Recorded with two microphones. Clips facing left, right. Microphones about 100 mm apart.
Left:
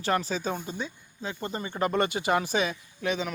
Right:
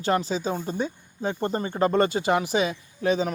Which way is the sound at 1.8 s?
30° right (ahead or behind).